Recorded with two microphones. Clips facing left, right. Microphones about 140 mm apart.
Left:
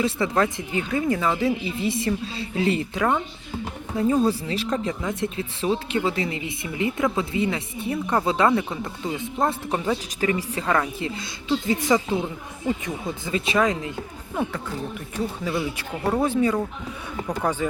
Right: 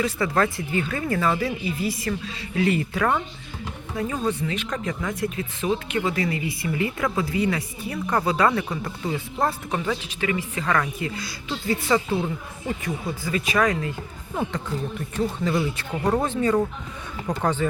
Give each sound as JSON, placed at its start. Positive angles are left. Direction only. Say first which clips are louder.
{"t": 0.0, "sound": "speech", "louder": "left 1 dB", "side_deg": 20}
{"t": 3.9, "sound": "speech", "louder": "left 5 dB", "side_deg": 35}
{"t": 10.2, "sound": "a woman's voice", "louder": "left 2 dB", "side_deg": 35}
{"t": 15.1, "sound": "speech", "louder": "right 3 dB", "side_deg": 10}